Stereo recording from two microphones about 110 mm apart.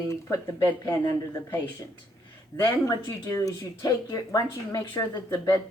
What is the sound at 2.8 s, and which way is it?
Speech, 30° left (ahead or behind).